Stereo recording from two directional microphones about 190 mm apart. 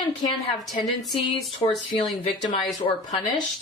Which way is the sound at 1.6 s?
25° left (ahead or behind).